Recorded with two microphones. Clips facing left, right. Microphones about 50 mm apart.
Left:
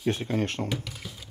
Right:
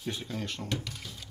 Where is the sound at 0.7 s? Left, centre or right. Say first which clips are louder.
Left 2 dB; centre.